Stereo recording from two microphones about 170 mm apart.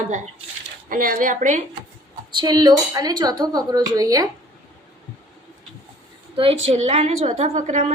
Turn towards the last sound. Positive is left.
turn(degrees=-45)  # may be behind; listen again after turning